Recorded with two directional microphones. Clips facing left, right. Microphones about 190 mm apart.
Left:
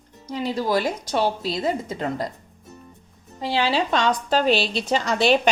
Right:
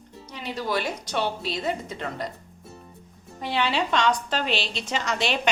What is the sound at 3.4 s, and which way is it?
A woman's voice, 30° left (ahead or behind).